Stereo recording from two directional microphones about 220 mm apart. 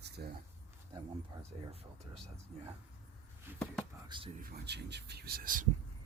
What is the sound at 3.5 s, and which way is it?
Speech, 10° right (ahead or behind).